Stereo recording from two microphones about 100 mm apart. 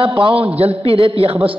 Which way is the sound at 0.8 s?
75° right (ahead or behind).